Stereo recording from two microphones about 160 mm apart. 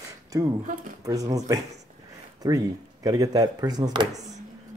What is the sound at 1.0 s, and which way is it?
Speech, 20° right (ahead or behind).